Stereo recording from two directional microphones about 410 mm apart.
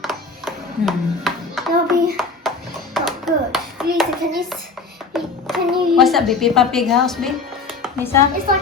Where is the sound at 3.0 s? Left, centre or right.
Centre.